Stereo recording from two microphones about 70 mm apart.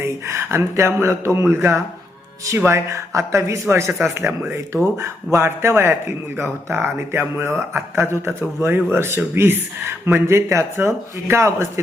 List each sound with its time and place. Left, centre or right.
0.0 s a man's voice: right
5.3 s a man's voice: right
10.2 s a man's voice: right